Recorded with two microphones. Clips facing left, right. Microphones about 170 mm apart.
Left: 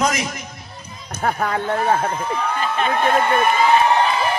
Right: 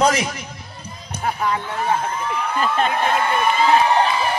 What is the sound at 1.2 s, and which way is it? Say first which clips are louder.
Speech: left 2 dB; 55° left (ahead or behind).